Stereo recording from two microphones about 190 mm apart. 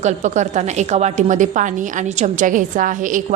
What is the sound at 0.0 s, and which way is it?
A woman's voice, 40° right (ahead or behind).